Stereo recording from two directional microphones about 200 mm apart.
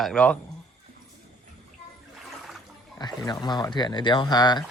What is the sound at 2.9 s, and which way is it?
Speech, 20° left (ahead or behind).